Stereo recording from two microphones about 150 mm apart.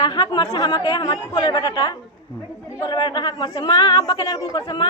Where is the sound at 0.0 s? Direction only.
30° left (ahead or behind).